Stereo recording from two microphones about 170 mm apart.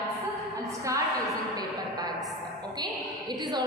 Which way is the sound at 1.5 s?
20° right (ahead or behind).